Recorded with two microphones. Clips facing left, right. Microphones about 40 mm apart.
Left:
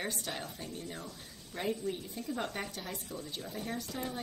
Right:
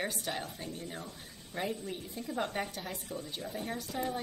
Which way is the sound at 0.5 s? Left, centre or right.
Right.